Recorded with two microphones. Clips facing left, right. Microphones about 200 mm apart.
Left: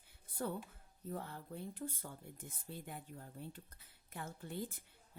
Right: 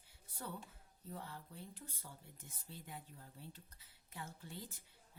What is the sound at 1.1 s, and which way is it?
Speech, 50° left (ahead or behind).